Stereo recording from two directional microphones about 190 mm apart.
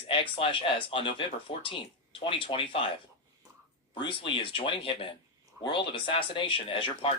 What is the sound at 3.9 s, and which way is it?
Speech, 25° left (ahead or behind).